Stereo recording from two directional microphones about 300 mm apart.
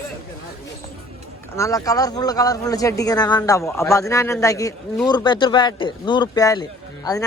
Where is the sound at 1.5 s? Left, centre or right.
Centre.